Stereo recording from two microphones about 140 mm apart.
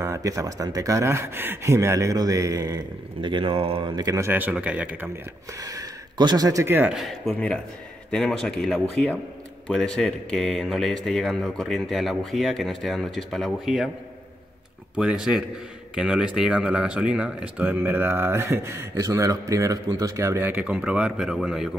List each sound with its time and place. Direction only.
0.0 s speech: 25° right (ahead or behind)
5.5 s speech: 25° right (ahead or behind)
7.2 s speech: 10° left (ahead or behind)
15.0 s speech: 5° right (ahead or behind); by 20.5 s 20° right (ahead or behind)
20.5 s speech: 10° right (ahead or behind)